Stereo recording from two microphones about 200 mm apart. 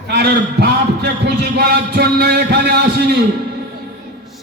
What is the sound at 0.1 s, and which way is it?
A man's voice, 55° right (ahead or behind).